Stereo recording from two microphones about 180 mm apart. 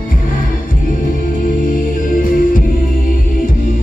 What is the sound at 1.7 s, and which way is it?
Music, 50° left (ahead or behind).